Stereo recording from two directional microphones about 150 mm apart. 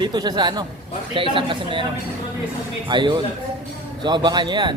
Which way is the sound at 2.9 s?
30° right (ahead or behind).